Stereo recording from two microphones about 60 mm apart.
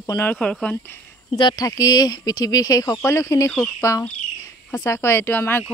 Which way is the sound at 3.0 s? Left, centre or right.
Left.